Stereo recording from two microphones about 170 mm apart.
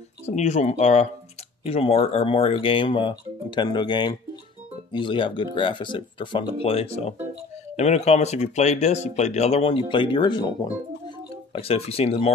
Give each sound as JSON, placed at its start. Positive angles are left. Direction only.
{"t": 0.3, "sound": "speech", "side_deg": 45}